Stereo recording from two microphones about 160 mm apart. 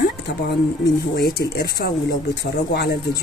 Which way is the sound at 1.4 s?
90° left.